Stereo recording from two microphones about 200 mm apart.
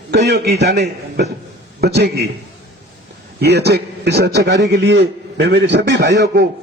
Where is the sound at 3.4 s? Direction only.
55° right (ahead or behind).